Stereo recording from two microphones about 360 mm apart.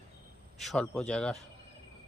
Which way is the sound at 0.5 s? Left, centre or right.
Centre.